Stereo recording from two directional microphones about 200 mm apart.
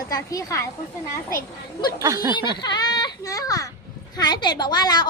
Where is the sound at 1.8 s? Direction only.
20° left (ahead or behind).